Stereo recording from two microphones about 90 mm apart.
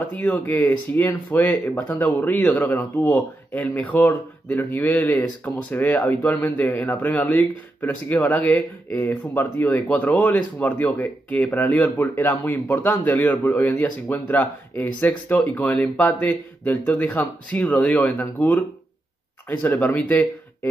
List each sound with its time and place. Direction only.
0.2 s speech: 20° left (ahead or behind)
19.6 s speech: 20° left (ahead or behind)